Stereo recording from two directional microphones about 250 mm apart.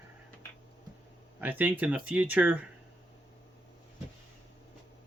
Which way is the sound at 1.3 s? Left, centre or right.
Centre.